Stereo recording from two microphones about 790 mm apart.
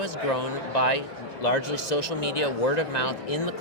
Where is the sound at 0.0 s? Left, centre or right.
Left.